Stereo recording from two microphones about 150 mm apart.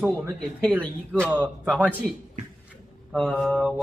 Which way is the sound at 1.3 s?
Centre (ahead or behind).